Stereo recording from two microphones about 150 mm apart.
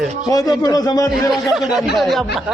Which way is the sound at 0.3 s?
25° left (ahead or behind).